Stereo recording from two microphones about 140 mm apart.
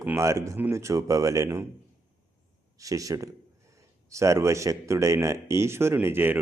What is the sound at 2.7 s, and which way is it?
Speech, 25° right (ahead or behind).